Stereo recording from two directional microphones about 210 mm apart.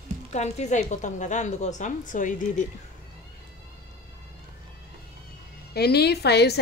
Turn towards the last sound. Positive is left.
turn(degrees=50)  # may be behind; listen again after turning